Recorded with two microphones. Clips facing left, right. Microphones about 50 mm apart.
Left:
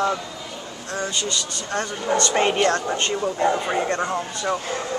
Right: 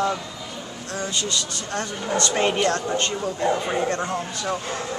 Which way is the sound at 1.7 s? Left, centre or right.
Centre.